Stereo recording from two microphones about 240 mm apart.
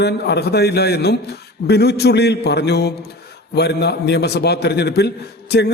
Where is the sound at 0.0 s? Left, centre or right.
Left.